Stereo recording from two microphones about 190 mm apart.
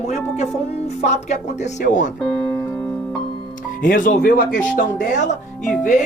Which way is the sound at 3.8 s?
45° left (ahead or behind).